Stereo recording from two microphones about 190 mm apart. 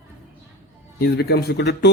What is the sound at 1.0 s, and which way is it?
Speech, 60° left (ahead or behind).